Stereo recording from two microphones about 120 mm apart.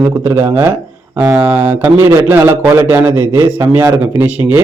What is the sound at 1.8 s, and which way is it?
Speech, 20° right (ahead or behind).